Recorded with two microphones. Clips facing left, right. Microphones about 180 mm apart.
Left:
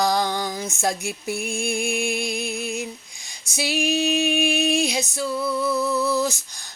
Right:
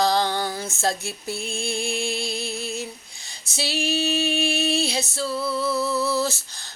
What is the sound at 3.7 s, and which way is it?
Female singing, 15° left (ahead or behind).